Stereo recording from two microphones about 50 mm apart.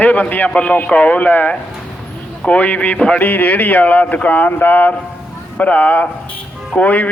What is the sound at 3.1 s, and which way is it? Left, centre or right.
Speech, left.